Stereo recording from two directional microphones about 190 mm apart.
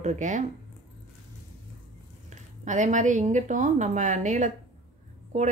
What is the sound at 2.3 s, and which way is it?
Speech, 40° right (ahead or behind).